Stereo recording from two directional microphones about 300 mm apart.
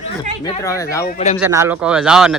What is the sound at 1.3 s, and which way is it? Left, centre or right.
Speech, centre.